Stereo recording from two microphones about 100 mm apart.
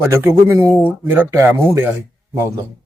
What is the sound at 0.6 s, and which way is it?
Speech, 20° left (ahead or behind).